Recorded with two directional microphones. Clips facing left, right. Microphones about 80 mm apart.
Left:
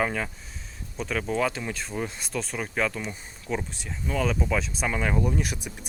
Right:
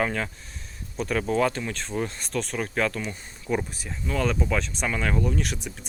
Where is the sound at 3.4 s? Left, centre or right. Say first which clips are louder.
Right 3 dB; centre.